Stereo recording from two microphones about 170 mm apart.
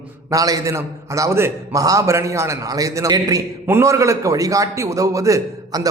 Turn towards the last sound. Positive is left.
turn(degrees=-20)  # may be behind; listen again after turning